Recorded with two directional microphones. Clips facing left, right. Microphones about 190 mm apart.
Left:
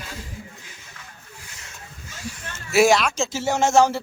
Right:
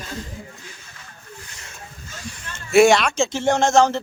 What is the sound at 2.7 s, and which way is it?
Speech, centre (ahead or behind).